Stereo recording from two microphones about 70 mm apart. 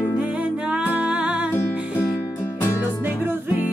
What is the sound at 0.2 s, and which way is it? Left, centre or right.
Music, centre.